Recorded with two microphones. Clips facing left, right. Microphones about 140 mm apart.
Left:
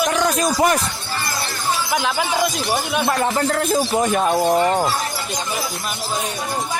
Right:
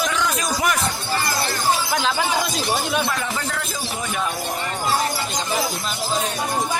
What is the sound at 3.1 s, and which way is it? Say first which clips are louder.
Speech: left 7 dB; 45° left (ahead or behind).